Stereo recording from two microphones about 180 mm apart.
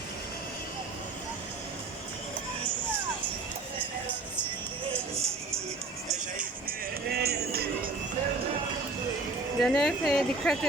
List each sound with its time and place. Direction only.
5.1 s music: 15° right (ahead or behind)
6.1 s music: 50° right (ahead or behind)
9.6 s a woman's voice: centre (ahead or behind)